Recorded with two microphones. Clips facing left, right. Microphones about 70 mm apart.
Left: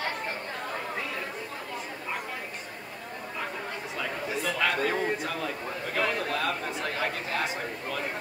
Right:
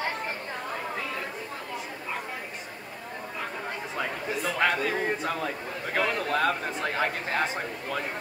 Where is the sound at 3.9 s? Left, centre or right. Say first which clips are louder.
Right 1 dB; right.